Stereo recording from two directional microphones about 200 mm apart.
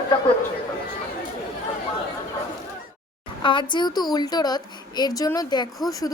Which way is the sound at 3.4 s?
25° left (ahead or behind).